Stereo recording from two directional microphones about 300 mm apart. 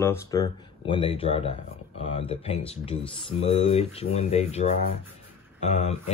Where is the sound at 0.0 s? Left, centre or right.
Centre.